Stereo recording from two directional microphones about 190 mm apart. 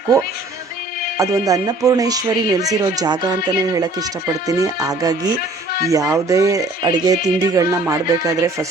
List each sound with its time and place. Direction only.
1.2 s speech: 20° right (ahead or behind)